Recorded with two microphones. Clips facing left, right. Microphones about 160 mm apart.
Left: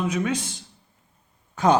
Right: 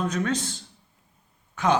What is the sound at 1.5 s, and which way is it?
Speech, 35° left (ahead or behind).